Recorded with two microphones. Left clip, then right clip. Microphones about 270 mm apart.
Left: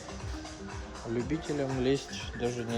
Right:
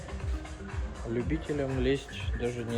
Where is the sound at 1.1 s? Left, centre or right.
Centre.